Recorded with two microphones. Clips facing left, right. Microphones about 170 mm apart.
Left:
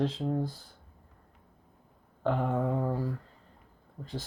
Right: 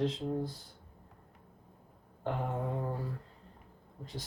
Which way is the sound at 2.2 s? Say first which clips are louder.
Left 6 dB; 90° left.